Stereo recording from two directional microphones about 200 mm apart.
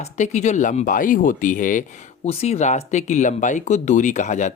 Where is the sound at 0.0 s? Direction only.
35° left (ahead or behind).